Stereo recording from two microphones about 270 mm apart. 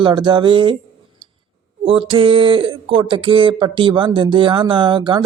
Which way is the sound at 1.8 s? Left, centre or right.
Centre.